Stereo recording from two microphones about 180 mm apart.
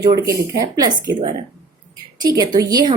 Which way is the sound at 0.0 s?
20° right (ahead or behind).